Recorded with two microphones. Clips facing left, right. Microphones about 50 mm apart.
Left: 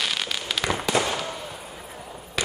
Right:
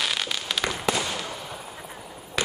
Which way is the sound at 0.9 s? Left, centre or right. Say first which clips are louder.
Left 5 dB; left.